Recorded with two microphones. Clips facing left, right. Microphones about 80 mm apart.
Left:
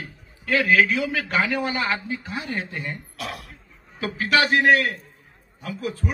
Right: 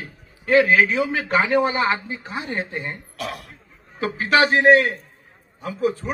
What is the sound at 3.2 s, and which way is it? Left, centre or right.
Speech, centre.